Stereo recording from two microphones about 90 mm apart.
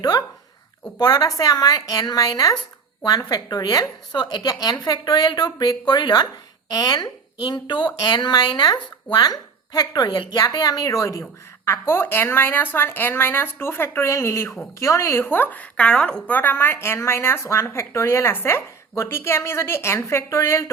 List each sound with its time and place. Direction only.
0.0 s a woman's voice: 50° left (ahead or behind)
11.6 s a woman's voice: 25° left (ahead or behind)
15.8 s a woman's voice: 10° left (ahead or behind); by 20.7 s 30° left (ahead or behind)